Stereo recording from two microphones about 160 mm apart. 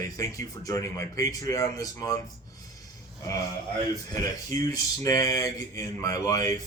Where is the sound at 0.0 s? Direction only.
20° left (ahead or behind).